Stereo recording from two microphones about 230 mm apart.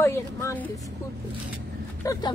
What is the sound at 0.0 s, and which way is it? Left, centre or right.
Speech, centre.